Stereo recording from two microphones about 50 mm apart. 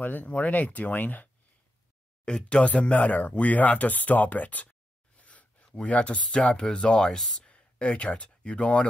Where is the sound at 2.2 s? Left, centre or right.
Centre.